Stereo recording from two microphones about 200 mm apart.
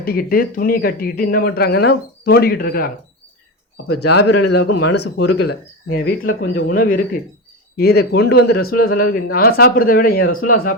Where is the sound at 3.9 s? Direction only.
55° left (ahead or behind).